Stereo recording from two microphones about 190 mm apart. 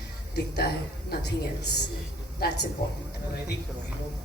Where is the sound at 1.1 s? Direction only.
55° left (ahead or behind).